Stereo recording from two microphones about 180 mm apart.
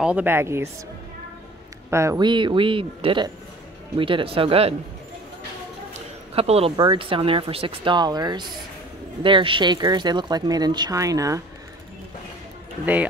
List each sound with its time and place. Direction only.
0.0 s speech: 10° right (ahead or behind)
1.9 s speech: 15° right (ahead or behind); by 4.7 s 30° right (ahead or behind)
6.3 s speech: 35° right (ahead or behind); by 11.4 s 20° right (ahead or behind)
12.8 s speech: 10° right (ahead or behind)